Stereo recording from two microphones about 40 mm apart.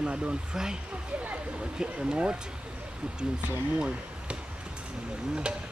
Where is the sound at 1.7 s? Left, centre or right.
Right.